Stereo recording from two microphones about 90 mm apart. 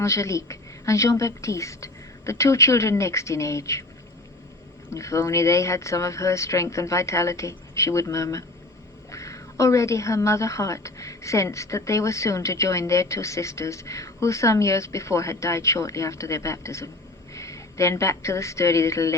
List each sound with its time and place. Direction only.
0.0 s a woman's voice: 35° left (ahead or behind)
4.9 s a woman's voice: 35° left (ahead or behind)